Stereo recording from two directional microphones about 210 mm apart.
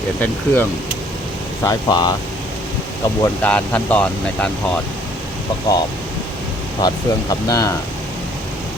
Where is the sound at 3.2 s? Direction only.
5° left (ahead or behind).